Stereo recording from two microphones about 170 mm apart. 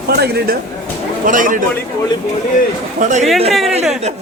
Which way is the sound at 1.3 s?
50° right (ahead or behind).